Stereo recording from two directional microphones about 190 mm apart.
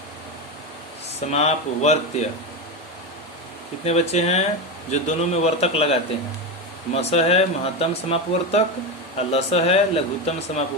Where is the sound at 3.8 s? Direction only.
35° left (ahead or behind).